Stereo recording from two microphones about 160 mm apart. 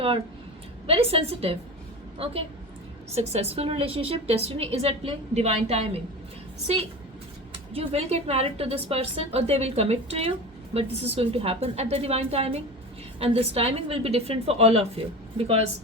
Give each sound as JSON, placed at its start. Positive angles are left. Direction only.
{"t": 0.9, "sound": "a woman's voice", "side_deg": -35}
{"t": 7.7, "sound": "a woman's voice", "side_deg": -40}